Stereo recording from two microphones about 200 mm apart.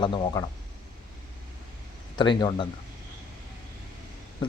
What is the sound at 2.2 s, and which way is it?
Speech, 25° left (ahead or behind).